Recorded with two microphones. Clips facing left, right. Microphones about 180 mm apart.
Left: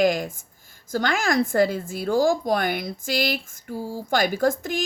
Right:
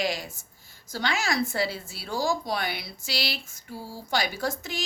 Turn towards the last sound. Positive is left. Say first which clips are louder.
# left 9 dB
turn(degrees=50)  # may be behind; listen again after turning